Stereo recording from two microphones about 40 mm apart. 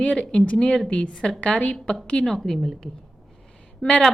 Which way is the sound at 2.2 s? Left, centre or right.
Centre.